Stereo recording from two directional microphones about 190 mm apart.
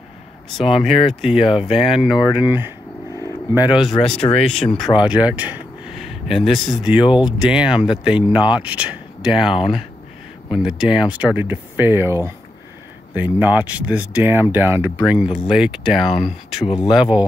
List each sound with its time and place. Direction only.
0.6 s speech: centre (ahead or behind)
16.6 s speech: 25° left (ahead or behind)
16.9 s speech: 5° right (ahead or behind)